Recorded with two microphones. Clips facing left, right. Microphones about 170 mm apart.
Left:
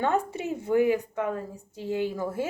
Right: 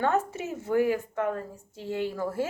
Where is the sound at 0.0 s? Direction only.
15° left (ahead or behind).